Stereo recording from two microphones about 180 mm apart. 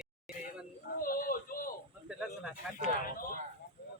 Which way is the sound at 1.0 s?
50° left (ahead or behind).